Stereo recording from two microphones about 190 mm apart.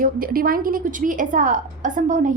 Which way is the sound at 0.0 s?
50° right (ahead or behind).